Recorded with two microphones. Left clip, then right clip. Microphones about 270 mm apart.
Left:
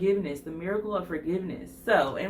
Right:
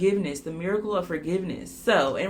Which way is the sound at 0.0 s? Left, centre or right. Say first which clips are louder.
Right 2 dB; right.